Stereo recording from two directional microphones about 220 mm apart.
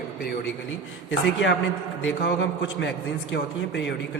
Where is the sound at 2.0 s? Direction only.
55° left (ahead or behind).